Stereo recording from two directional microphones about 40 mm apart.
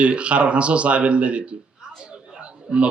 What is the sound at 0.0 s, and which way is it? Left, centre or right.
A man's voice, right.